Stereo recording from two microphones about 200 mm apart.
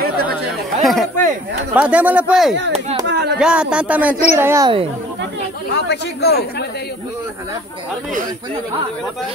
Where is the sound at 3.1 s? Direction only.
55° right (ahead or behind).